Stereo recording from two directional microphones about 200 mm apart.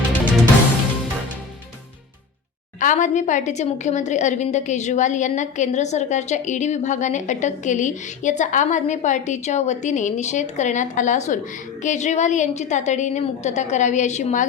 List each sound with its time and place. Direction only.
2.8 s a woman's voice: 40° left (ahead or behind)